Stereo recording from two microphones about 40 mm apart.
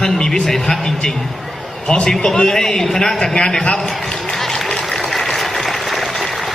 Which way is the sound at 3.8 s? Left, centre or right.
Centre.